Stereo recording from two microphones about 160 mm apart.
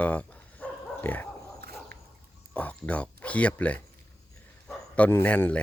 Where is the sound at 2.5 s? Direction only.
10° left (ahead or behind).